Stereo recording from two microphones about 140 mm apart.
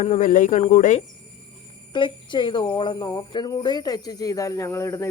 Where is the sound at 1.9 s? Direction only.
35° left (ahead or behind).